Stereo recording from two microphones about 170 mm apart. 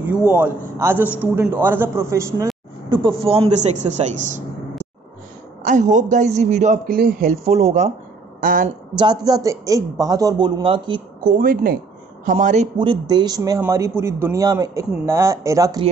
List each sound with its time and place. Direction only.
0.0 s speech: 10° right (ahead or behind)
2.9 s a man's voice: 30° right (ahead or behind)
5.6 s a man's voice: 45° right (ahead or behind)
8.9 s speech: 25° right (ahead or behind)
11.3 s a man's voice: 55° right (ahead or behind)
12.7 s speech: 30° right (ahead or behind)